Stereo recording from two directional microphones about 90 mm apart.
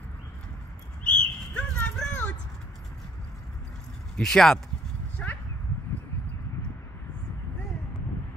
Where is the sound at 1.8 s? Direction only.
15° left (ahead or behind).